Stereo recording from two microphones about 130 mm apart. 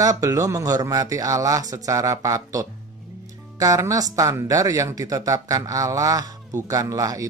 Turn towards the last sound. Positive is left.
turn(degrees=-25)  # may be behind; listen again after turning